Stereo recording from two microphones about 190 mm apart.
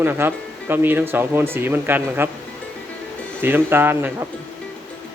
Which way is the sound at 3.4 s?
10° right (ahead or behind).